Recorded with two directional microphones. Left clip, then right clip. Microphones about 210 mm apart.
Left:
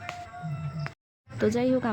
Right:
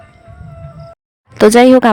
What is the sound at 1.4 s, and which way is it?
Speech, 55° right (ahead or behind).